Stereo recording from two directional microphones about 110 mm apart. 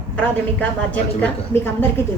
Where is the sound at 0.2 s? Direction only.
15° left (ahead or behind).